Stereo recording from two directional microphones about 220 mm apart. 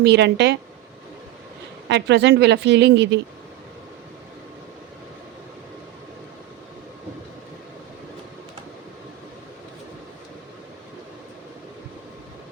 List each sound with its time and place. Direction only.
0.0 s a woman's voice: 50° right (ahead or behind)
1.9 s a woman's voice: 55° right (ahead or behind)